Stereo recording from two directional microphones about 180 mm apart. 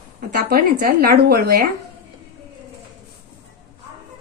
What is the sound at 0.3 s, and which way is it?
A woman's voice, 55° right (ahead or behind).